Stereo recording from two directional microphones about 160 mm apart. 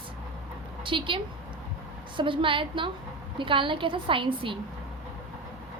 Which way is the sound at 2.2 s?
30° right (ahead or behind).